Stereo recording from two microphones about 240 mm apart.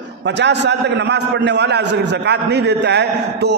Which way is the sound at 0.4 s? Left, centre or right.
Right.